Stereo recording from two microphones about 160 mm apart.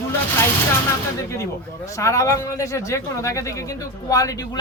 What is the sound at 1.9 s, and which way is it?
A man's voice, 20° left (ahead or behind).